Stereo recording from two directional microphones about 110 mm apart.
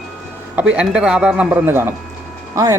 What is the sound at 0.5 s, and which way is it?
Speech, 10° right (ahead or behind).